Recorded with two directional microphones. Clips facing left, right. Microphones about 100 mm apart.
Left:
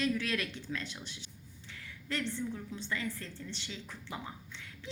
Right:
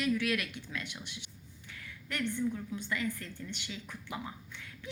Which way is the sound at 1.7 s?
25° left (ahead or behind).